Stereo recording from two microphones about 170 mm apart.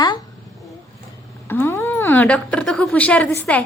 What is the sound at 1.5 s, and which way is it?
A woman's voice, 10° left (ahead or behind).